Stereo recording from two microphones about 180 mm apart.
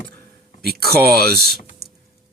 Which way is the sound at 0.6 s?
60° right (ahead or behind).